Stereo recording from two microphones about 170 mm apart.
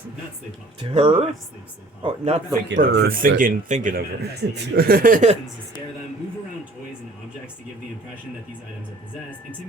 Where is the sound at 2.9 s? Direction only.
60° right (ahead or behind).